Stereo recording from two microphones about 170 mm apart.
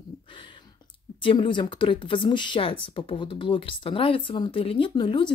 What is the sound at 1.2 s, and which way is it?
Speech, 30° left (ahead or behind).